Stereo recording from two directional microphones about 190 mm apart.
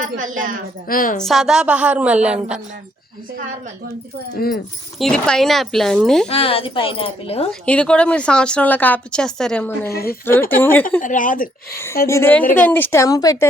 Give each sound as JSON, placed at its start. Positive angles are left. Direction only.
{"t": 0.0, "sound": "a woman's voice", "side_deg": -45}
{"t": 0.9, "sound": "speech", "side_deg": 45}
{"t": 1.2, "sound": "a woman's voice", "side_deg": 0}
{"t": 4.4, "sound": "speech", "side_deg": 55}
{"t": 4.9, "sound": "speech", "side_deg": 5}
{"t": 6.2, "sound": "a woman's voice", "side_deg": 30}
{"t": 7.6, "sound": "speech", "side_deg": 5}
{"t": 9.9, "sound": "speech", "side_deg": 55}
{"t": 10.5, "sound": "speech", "side_deg": 10}
{"t": 11.0, "sound": "speech", "side_deg": 45}
{"t": 12.0, "sound": "speech", "side_deg": 15}